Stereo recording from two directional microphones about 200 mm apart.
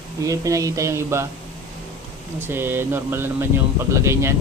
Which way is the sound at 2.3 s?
10° right (ahead or behind).